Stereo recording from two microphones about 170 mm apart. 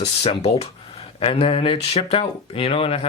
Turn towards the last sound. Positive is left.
turn(degrees=30)  # may be behind; listen again after turning